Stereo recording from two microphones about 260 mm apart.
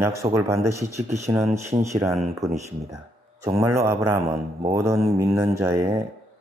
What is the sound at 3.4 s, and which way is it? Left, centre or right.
Speech, centre.